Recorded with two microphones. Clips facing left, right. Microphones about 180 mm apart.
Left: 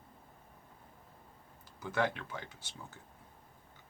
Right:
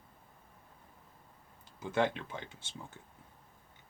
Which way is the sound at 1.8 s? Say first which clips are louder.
Right 2 dB; 25° right (ahead or behind).